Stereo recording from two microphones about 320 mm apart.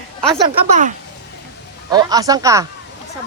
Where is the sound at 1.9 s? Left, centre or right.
Centre.